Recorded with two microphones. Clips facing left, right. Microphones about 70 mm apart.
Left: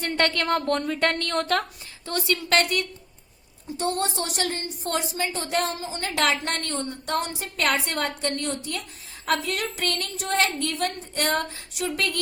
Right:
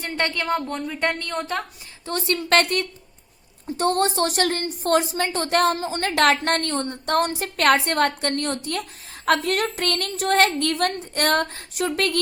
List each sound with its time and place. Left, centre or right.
0.1 s speech: centre
2.0 s a woman's voice: right